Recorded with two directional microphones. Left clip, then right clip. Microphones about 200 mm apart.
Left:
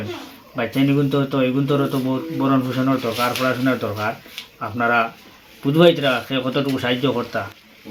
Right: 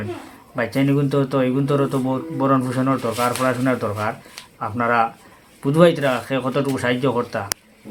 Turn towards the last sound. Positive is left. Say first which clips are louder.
# right 1 dB
turn(degrees=-25)  # may be behind; listen again after turning